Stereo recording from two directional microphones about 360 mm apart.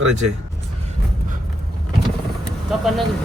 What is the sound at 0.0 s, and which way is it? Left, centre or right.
Speech, right.